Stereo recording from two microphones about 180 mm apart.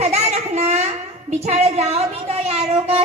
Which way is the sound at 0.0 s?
35° right (ahead or behind).